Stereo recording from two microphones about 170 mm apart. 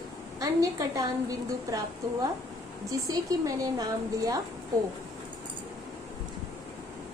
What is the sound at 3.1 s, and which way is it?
Speech, 20° right (ahead or behind).